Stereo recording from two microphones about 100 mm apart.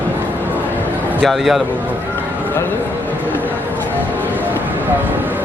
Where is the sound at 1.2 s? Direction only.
Centre (ahead or behind).